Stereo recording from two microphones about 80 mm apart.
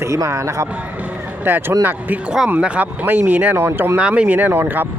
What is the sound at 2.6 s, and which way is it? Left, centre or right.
Speech, centre.